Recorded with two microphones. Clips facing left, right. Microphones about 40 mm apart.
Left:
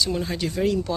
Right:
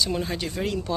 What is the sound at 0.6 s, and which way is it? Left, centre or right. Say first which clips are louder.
Speech: left 8 dB; right.